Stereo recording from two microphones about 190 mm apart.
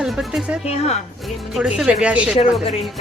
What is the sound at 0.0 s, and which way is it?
Speech, centre (ahead or behind).